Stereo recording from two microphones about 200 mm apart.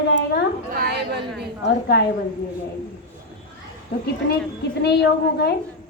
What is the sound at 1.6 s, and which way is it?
Speech, 55° left (ahead or behind).